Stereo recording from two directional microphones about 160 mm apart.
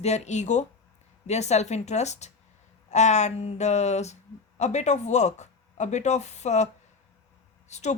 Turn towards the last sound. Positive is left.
turn(degrees=45)  # may be behind; listen again after turning